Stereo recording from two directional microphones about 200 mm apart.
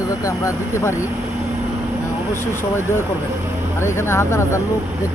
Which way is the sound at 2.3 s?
10° left (ahead or behind).